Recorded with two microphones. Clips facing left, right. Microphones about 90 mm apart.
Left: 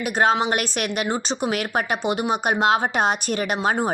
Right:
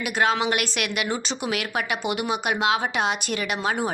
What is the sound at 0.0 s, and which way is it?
A woman's voice, 35° left (ahead or behind).